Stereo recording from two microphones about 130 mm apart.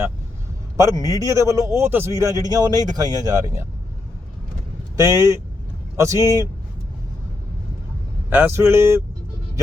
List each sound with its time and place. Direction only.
0.8 s a man's voice: 25° right (ahead or behind)
4.9 s a man's voice: 25° right (ahead or behind)
8.3 s a man's voice: 15° right (ahead or behind)